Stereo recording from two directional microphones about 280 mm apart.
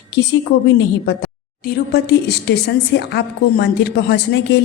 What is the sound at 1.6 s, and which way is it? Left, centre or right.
A woman's voice, left.